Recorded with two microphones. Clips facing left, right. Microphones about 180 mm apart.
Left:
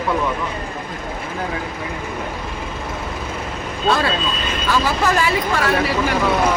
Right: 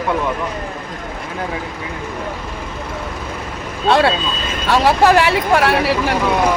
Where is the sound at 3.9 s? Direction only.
75° right (ahead or behind).